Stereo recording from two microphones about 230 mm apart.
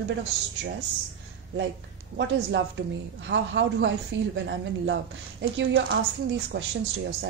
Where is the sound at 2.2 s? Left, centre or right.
Right.